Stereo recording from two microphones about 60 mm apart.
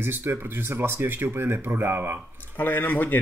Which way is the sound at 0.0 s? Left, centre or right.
Right.